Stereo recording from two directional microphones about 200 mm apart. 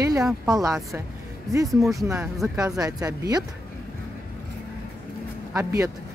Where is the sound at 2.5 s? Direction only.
15° right (ahead or behind).